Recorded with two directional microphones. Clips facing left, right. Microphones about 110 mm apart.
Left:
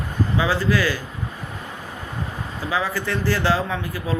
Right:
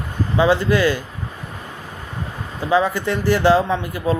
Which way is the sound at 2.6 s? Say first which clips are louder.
Right 7 dB; 20° right (ahead or behind).